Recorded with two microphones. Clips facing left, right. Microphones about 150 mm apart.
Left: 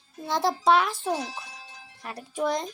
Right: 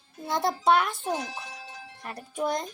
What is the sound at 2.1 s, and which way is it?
Speech, centre (ahead or behind).